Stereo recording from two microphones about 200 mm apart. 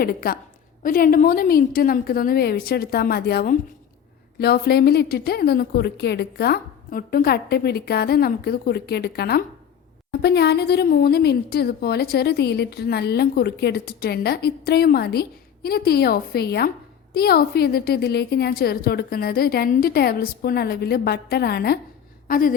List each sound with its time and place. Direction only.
0.0 s a woman's voice: 45° left (ahead or behind)